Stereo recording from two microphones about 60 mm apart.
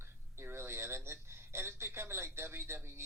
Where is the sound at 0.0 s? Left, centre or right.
Right.